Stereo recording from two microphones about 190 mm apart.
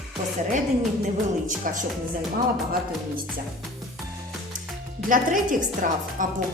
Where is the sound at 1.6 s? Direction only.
45° right (ahead or behind).